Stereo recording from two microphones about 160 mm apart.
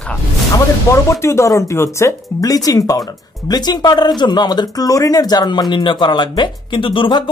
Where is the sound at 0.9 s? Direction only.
20° left (ahead or behind).